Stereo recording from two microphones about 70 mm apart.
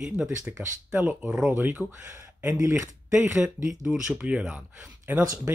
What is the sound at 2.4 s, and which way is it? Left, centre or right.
Speech, right.